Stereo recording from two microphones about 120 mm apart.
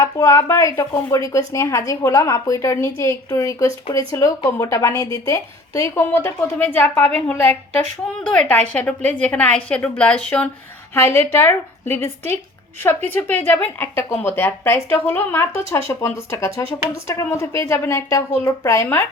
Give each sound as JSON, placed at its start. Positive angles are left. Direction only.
{"t": 0.0, "sound": "a woman's voice", "side_deg": 25}
{"t": 8.2, "sound": "a woman's voice", "side_deg": 10}